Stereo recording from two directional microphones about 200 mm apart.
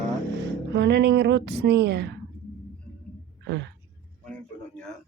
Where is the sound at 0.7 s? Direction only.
55° right (ahead or behind).